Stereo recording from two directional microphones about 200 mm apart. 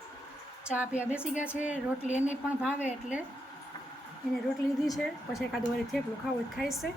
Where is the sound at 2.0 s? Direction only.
35° left (ahead or behind).